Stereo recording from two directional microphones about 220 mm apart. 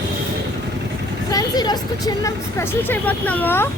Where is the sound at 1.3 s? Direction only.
20° left (ahead or behind).